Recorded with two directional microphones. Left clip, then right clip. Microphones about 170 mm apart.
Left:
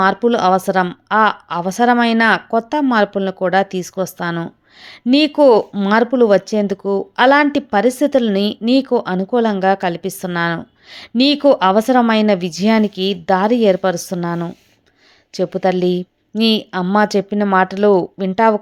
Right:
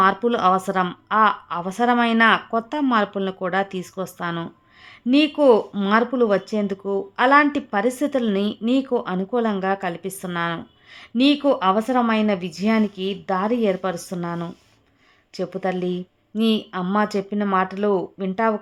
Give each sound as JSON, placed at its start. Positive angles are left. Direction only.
{"t": 0.0, "sound": "a woman's voice", "side_deg": 25}